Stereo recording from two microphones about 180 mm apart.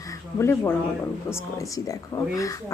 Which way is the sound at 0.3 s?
15° left (ahead or behind).